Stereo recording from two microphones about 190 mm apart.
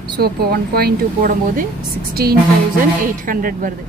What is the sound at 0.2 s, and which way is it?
A woman's voice, 55° right (ahead or behind).